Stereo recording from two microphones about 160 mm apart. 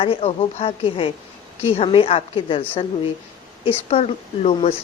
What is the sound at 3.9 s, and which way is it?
Speech, 40° left (ahead or behind).